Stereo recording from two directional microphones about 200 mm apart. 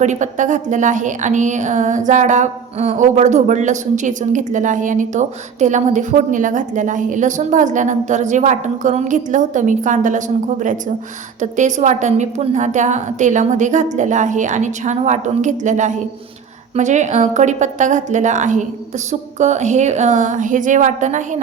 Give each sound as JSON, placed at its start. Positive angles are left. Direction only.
{"t": 0.0, "sound": "a woman's voice", "side_deg": -35}